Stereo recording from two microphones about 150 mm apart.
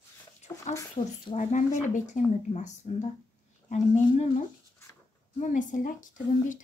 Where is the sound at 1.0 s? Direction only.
45° left (ahead or behind); by 6.2 s 60° left (ahead or behind).